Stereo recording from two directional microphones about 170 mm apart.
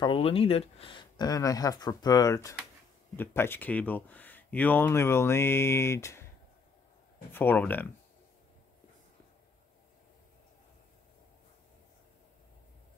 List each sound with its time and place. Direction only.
0.0 s speech: 30° left (ahead or behind); by 6.2 s 15° left (ahead or behind)
7.3 s speech: 10° left (ahead or behind)